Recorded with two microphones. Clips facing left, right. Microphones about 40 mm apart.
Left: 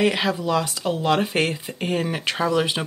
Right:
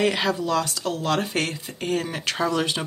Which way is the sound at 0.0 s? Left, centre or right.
Centre.